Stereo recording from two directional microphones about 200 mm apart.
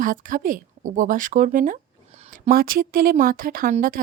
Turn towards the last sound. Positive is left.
turn(degrees=-45)  # may be behind; listen again after turning